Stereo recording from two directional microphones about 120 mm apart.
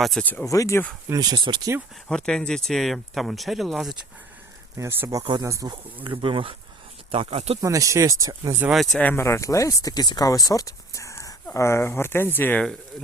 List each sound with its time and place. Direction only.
0.0 s speech: centre (ahead or behind)
0.4 s speech: 25° left (ahead or behind)
1.1 s speech: 35° right (ahead or behind)
2.0 s speech: 5° left (ahead or behind)
4.8 s speech: 20° right (ahead or behind)
6.0 s speech: 45° right (ahead or behind)
7.6 s speech: 25° right (ahead or behind)
8.7 s speech: centre (ahead or behind)
9.0 s speech: 15° left (ahead or behind)
9.2 s speech: 25° left (ahead or behind)